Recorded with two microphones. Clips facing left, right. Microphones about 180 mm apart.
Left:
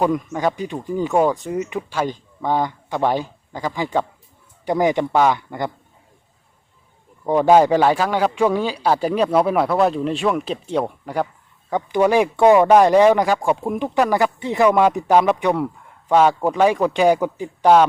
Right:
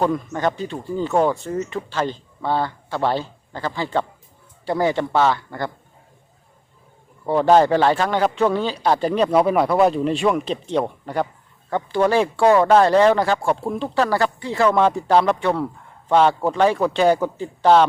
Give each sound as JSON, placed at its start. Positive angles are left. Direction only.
{"t": 0.0, "sound": "speech", "side_deg": 10}
{"t": 7.3, "sound": "speech", "side_deg": 15}